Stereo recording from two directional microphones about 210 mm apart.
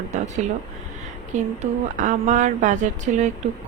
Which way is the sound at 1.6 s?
35° right (ahead or behind).